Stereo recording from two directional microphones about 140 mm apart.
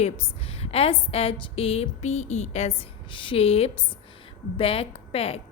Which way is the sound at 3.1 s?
40° left (ahead or behind).